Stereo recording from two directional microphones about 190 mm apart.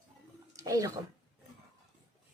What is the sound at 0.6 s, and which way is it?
Speech, 15° right (ahead or behind).